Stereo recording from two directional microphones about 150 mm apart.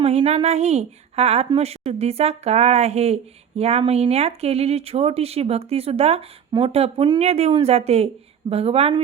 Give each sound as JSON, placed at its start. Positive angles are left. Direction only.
{"t": 0.0, "sound": "speech", "side_deg": -45}